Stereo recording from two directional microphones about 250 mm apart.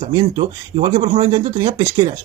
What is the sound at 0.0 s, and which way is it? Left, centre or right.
A man's voice, centre.